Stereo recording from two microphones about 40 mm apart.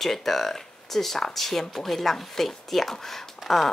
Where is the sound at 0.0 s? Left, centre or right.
Centre.